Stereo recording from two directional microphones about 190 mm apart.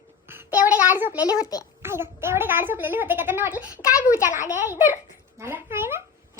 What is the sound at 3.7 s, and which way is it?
Speech, 15° left (ahead or behind).